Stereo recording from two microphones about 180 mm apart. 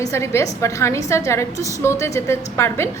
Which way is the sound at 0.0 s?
15° left (ahead or behind).